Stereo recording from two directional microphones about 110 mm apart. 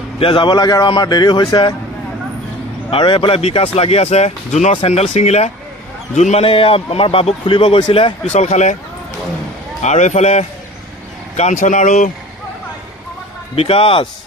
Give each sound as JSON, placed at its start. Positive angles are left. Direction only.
{"t": 0.2, "sound": "speech", "side_deg": 50}
{"t": 2.9, "sound": "a man's voice", "side_deg": 50}
{"t": 8.3, "sound": "a man's voice", "side_deg": 90}
{"t": 9.8, "sound": "a man's voice", "side_deg": 90}
{"t": 13.6, "sound": "a man's voice", "side_deg": 60}